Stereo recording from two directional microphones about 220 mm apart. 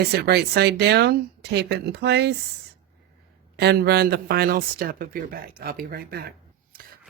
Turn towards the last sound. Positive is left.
turn(degrees=-40)  # may be behind; listen again after turning